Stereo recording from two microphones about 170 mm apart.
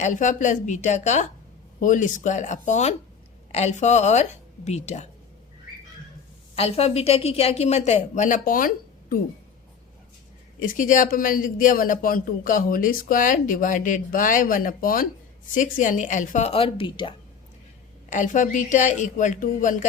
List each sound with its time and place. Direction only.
0.0 s a man's voice: 45° left (ahead or behind)
6.6 s a woman's voice: 35° left (ahead or behind); by 9.1 s 55° left (ahead or behind)
10.6 s a man's voice: 50° left (ahead or behind); by 17.2 s 30° left (ahead or behind)
18.1 s a man's voice: 45° left (ahead or behind)